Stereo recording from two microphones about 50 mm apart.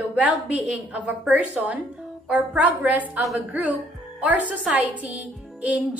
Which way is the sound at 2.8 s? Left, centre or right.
Right.